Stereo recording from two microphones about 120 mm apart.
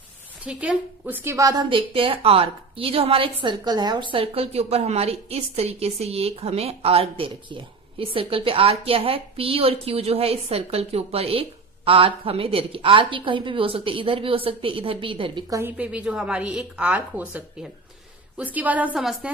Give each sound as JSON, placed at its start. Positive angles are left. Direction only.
{"t": 0.4, "sound": "speech", "side_deg": -10}
{"t": 1.7, "sound": "a woman's voice", "side_deg": -50}
{"t": 15.4, "sound": "a woman's voice", "side_deg": -25}
{"t": 15.8, "sound": "speech", "side_deg": -10}
{"t": 18.9, "sound": "speech", "side_deg": 0}